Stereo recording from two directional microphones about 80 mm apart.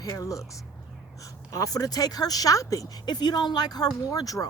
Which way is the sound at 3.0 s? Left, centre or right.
Left.